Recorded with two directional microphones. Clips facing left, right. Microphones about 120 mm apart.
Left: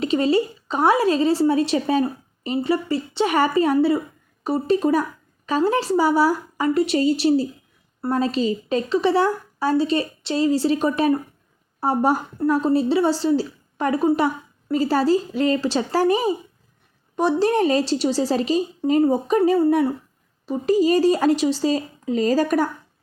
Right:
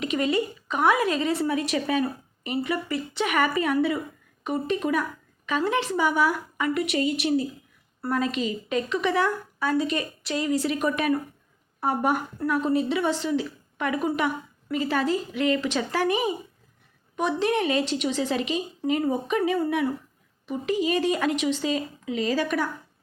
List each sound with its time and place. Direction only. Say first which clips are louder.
0.0 s a woman's voice: left 6 dB; 30° left (ahead or behind)